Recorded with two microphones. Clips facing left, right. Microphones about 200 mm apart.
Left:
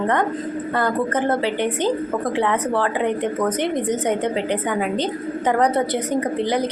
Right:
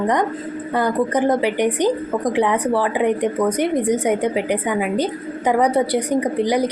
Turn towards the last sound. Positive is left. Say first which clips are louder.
# right 3 dB
turn(degrees=-10)  # may be behind; listen again after turning